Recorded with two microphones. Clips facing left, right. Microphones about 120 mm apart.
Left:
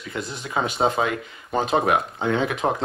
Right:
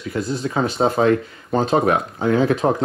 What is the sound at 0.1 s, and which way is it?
Speech, 20° left (ahead or behind).